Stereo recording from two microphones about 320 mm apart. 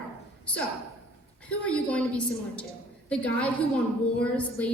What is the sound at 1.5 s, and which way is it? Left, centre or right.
A woman's voice, centre.